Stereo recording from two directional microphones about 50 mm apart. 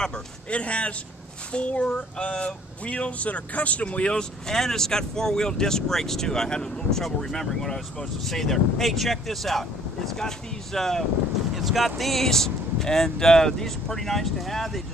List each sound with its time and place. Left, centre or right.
0.5 s a man's voice: left; by 11.1 s centre
11.5 s speech: centre